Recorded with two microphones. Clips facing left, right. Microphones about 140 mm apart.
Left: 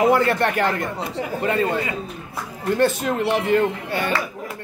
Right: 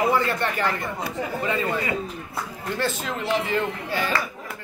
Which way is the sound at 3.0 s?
60° left (ahead or behind).